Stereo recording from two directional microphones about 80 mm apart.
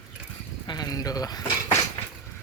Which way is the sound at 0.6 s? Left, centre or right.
Left.